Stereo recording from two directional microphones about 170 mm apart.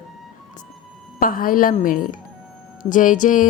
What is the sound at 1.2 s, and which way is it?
A woman's voice, 55° left (ahead or behind).